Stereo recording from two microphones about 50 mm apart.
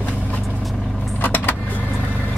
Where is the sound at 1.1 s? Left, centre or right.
Left.